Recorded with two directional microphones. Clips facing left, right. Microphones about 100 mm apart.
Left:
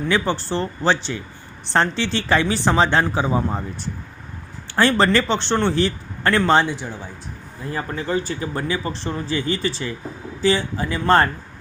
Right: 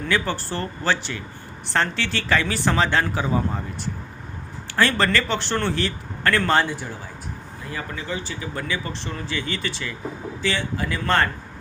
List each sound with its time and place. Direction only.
0.1 s a man's voice: 25° left (ahead or behind)
4.7 s a man's voice: 30° left (ahead or behind)
7.7 s speech: 35° left (ahead or behind)